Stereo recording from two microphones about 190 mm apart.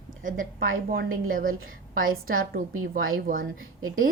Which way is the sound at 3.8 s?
90° right.